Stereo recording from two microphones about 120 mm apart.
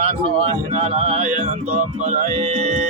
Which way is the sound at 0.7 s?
55° right (ahead or behind).